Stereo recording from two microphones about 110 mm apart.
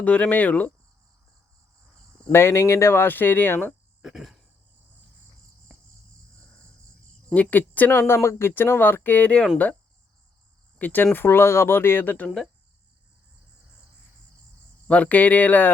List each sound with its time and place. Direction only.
0.0 s speech: 15° left (ahead or behind)
2.3 s speech: 25° left (ahead or behind)
4.0 s cricket: centre (ahead or behind)
7.3 s speech: 15° left (ahead or behind)
10.8 s speech: 15° left (ahead or behind)
14.8 s speech: 10° left (ahead or behind)